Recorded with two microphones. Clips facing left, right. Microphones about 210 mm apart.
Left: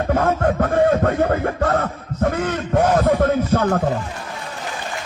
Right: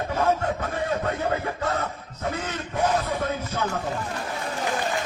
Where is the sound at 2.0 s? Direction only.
60° left (ahead or behind).